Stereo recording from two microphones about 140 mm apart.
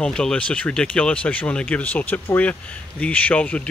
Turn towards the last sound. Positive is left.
turn(degrees=10)  # may be behind; listen again after turning